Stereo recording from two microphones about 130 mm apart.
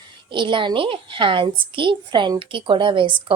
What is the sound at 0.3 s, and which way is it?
A woman's voice, 40° right (ahead or behind).